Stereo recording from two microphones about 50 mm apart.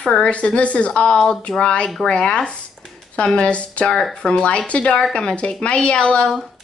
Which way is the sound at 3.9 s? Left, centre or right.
Centre.